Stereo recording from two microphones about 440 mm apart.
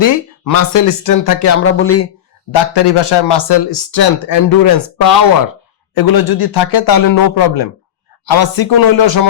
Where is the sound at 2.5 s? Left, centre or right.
Left.